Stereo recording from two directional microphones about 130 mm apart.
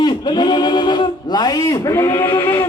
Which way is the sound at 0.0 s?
35° left (ahead or behind).